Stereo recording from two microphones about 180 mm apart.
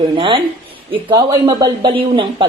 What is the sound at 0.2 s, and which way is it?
A man's voice, 30° right (ahead or behind).